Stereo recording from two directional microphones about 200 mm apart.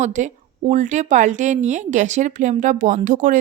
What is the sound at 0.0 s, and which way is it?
A woman's voice, 35° right (ahead or behind).